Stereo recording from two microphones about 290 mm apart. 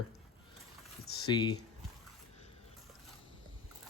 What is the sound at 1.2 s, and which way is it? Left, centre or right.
Speech, centre.